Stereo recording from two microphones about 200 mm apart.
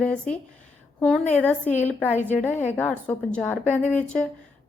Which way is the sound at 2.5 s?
35° left (ahead or behind).